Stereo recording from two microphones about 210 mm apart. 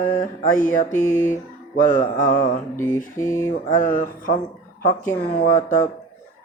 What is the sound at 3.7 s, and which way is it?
Music, 40° left (ahead or behind).